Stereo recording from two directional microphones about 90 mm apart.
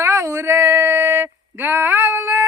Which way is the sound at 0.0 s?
35° right (ahead or behind).